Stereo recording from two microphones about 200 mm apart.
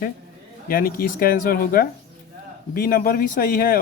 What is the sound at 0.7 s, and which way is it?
Speech, 45° left (ahead or behind).